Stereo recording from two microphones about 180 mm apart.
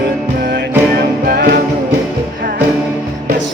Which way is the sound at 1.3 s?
65° right (ahead or behind).